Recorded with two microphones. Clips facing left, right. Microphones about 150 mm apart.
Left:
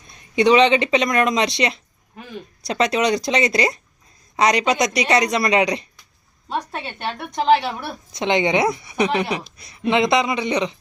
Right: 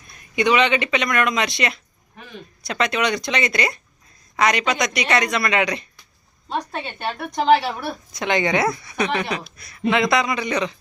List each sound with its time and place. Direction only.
0.1 s speech: 30° left (ahead or behind)
6.5 s a woman's voice: 5° left (ahead or behind)
8.1 s speech: 25° left (ahead or behind)